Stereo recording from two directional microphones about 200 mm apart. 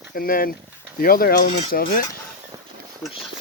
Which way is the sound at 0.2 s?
45° left (ahead or behind).